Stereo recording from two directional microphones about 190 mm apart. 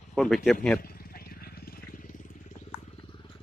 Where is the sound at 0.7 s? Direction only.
50° left (ahead or behind).